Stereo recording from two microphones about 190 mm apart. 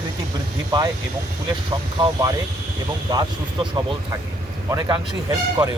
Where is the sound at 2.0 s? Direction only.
20° right (ahead or behind).